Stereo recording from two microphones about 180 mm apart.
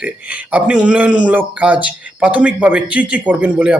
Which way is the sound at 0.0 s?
10° right (ahead or behind).